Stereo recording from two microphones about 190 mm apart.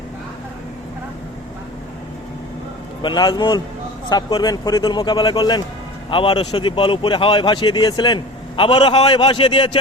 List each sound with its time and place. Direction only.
3.0 s a man's voice: 25° left (ahead or behind)